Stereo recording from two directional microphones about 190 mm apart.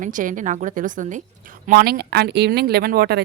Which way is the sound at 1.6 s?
55° right (ahead or behind).